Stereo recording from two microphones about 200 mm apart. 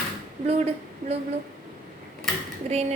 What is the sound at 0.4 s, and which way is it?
Speech, 30° right (ahead or behind).